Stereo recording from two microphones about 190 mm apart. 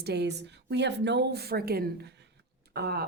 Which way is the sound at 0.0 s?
60° right (ahead or behind).